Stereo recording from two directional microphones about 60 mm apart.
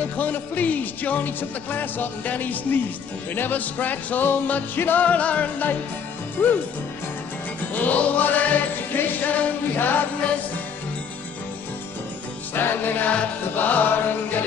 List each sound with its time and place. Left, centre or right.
0.0 s speech: left
7.7 s speech: left
12.5 s music: left